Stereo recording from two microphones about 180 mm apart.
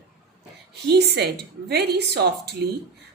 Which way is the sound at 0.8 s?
65° right (ahead or behind).